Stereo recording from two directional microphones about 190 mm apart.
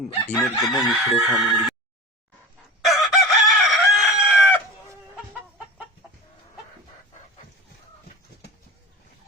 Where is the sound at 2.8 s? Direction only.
Centre (ahead or behind).